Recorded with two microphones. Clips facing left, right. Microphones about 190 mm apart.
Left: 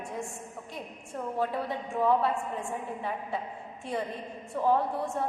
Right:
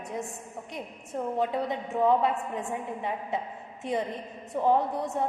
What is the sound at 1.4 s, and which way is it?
A woman's voice, 20° right (ahead or behind).